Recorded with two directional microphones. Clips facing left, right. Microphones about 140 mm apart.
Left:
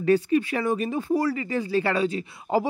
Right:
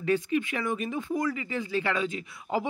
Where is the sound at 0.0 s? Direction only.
40° left (ahead or behind).